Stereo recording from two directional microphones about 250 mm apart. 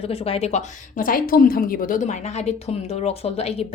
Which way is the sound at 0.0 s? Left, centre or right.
Left.